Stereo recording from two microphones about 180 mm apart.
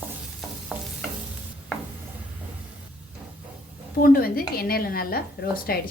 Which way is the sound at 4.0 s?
55° left (ahead or behind).